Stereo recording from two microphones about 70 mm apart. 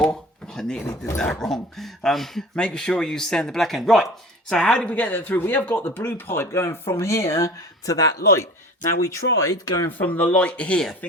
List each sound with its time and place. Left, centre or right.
0.0 s a sound: centre
1.1 s a man's voice: centre
4.4 s speech: centre; by 8.0 s left
9.0 s speech: left
10.0 s speech: left